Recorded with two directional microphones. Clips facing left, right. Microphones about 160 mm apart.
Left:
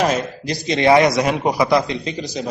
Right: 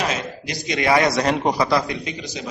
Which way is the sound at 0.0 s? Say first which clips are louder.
Left 6 dB; 30° left (ahead or behind).